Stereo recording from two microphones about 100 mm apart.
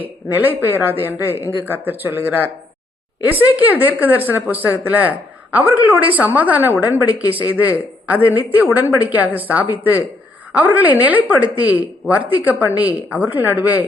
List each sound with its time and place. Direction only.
0.6 s a woman's voice: 20° right (ahead or behind)